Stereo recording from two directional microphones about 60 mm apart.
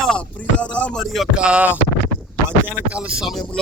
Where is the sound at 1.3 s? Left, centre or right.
Centre.